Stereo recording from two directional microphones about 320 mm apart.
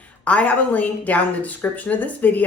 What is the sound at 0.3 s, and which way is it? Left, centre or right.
A woman's voice, centre.